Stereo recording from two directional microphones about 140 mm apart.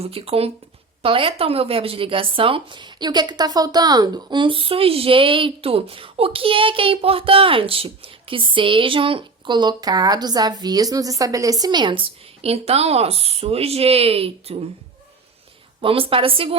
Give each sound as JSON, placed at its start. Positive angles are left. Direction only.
{"t": 0.0, "sound": "speech", "side_deg": -45}
{"t": 15.8, "sound": "speech", "side_deg": -40}